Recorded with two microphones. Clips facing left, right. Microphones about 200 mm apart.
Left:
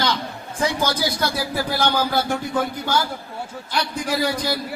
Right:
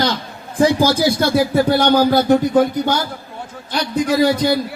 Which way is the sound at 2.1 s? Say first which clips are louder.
Right 9 dB; 40° right (ahead or behind).